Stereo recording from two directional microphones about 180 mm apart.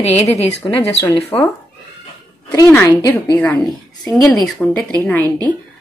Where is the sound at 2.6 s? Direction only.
10° left (ahead or behind).